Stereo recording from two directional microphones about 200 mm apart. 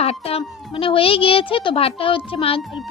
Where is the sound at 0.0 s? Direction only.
30° left (ahead or behind).